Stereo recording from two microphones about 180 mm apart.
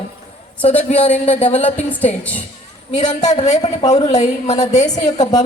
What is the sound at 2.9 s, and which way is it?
A woman's voice, 40° left (ahead or behind).